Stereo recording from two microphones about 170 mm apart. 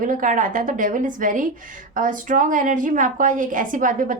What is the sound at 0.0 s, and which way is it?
A woman's voice, 50° right (ahead or behind).